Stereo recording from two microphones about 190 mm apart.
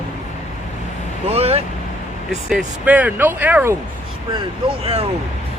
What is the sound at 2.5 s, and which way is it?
Speech, 5° right (ahead or behind).